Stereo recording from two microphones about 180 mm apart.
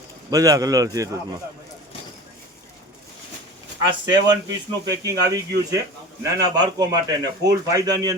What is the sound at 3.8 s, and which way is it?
A man's voice, 25° right (ahead or behind).